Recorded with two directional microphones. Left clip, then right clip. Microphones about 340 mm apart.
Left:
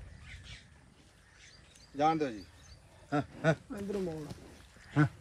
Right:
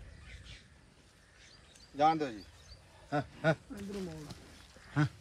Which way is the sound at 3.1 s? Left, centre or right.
Right.